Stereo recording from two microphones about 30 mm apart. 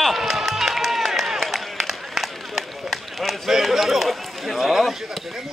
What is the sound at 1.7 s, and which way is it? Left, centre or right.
Run, centre.